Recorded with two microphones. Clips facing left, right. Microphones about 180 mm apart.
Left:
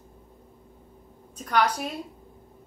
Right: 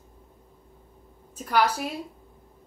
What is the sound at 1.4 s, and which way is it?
Speech, 5° right (ahead or behind).